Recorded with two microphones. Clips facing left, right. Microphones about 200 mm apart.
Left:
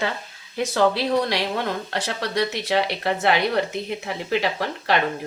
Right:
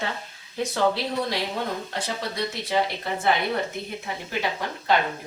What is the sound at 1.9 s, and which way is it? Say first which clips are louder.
A woman's voice: left 4 dB; 75° left (ahead or behind).